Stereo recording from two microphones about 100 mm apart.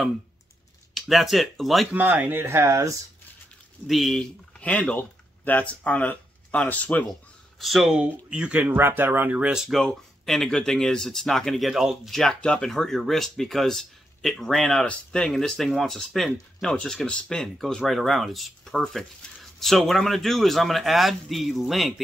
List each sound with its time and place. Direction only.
0.9 s speech: centre (ahead or behind)
1.9 s speech: 20° right (ahead or behind)
3.8 s speech: centre (ahead or behind)
7.5 s speech: centre (ahead or behind)